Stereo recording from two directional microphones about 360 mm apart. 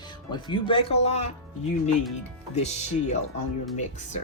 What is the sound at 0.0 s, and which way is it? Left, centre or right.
Speech, centre.